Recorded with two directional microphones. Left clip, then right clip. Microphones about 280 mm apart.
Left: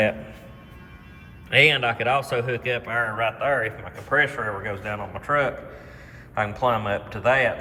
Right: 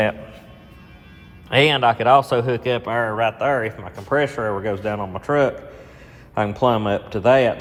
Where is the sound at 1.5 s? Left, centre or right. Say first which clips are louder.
Right 2 dB; centre.